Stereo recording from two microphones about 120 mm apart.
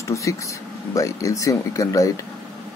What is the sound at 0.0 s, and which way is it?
Speech, 25° left (ahead or behind).